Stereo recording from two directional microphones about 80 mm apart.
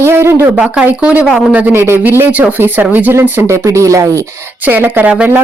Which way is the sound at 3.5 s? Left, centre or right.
Right.